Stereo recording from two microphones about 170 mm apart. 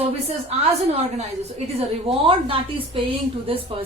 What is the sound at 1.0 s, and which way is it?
A woman's voice, 40° right (ahead or behind).